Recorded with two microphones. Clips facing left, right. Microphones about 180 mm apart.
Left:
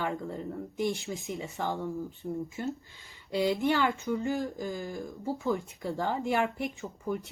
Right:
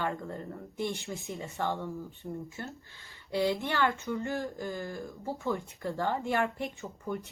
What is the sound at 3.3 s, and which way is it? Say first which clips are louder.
Speech: left 3 dB; 15° left (ahead or behind).